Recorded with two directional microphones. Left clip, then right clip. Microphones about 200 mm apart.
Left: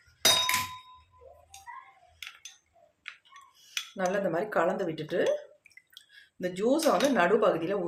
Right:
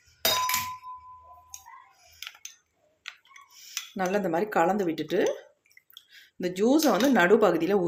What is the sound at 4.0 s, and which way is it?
A woman's voice, 35° right (ahead or behind).